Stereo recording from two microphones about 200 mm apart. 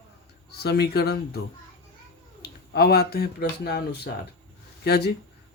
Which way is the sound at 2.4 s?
50° left (ahead or behind).